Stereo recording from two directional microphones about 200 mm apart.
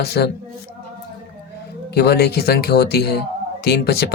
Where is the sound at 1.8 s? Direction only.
55° left (ahead or behind).